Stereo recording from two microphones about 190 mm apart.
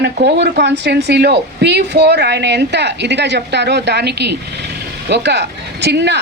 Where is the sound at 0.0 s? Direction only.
60° right (ahead or behind).